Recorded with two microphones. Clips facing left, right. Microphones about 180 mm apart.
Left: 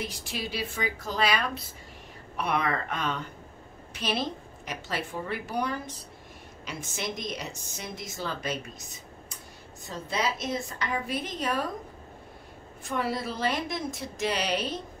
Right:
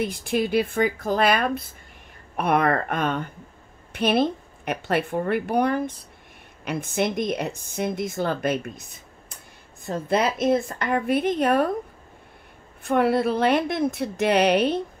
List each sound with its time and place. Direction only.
0.0 s a woman's voice: 55° right (ahead or behind)
12.8 s a woman's voice: 60° right (ahead or behind)